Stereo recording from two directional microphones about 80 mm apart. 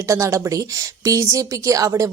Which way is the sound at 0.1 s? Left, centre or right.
Right.